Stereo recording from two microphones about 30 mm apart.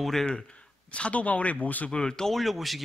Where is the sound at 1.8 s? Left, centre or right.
Left.